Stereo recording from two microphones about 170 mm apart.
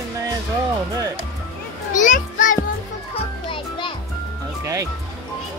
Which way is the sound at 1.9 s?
50° left (ahead or behind).